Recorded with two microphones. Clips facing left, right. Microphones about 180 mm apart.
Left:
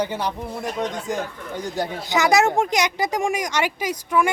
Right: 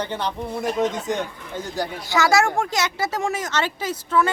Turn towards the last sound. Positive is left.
turn(degrees=15)  # may be behind; listen again after turning